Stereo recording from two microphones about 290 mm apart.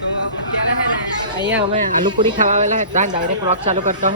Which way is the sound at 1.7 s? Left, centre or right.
Centre.